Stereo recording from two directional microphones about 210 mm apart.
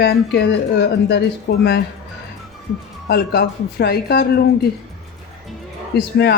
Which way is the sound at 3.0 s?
50° left (ahead or behind).